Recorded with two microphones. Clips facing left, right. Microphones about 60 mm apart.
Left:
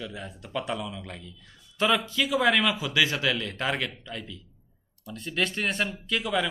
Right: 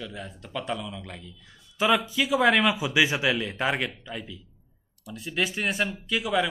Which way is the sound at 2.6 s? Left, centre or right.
Centre.